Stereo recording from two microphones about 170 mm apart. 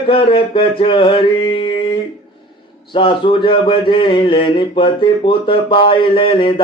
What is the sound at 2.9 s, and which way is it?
Speech, 30° left (ahead or behind).